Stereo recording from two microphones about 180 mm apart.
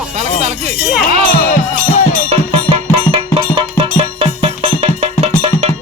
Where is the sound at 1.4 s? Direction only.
50° left (ahead or behind).